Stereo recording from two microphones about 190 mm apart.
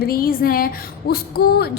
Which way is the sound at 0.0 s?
50° left (ahead or behind).